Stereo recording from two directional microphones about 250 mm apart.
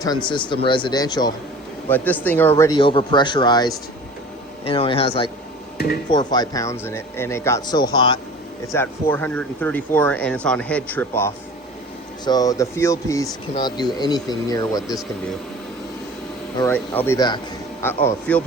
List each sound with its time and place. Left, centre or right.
0.0 s speech: centre
16.6 s speech: centre